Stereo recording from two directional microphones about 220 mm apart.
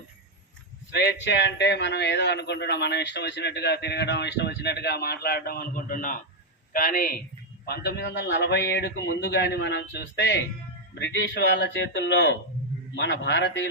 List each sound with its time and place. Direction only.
0.9 s a man's voice: 55° left (ahead or behind)